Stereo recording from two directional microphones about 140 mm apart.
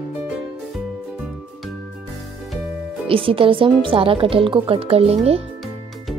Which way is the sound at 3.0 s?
40° right (ahead or behind).